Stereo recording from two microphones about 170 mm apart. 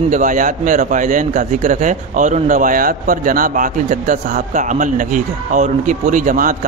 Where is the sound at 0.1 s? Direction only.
50° right (ahead or behind).